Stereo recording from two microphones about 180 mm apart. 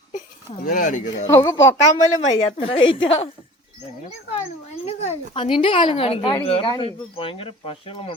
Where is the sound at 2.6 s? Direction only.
30° left (ahead or behind).